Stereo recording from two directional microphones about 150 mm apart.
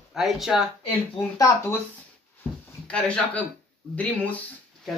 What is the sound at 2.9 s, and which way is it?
Speech, 5° left (ahead or behind).